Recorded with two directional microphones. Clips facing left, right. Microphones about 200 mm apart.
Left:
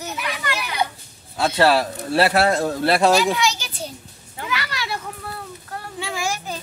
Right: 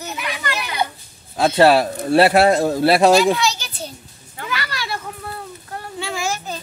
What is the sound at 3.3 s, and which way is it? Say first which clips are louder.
Children playing: right 1 dB; 15° left (ahead or behind).